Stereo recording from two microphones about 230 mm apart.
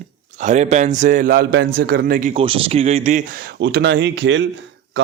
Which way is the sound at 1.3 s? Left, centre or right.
Right.